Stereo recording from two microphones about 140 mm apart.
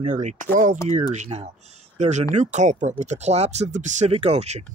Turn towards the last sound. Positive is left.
turn(degrees=-50)  # may be behind; listen again after turning